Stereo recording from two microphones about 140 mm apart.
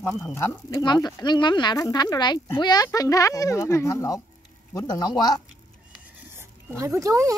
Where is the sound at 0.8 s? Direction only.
30° left (ahead or behind).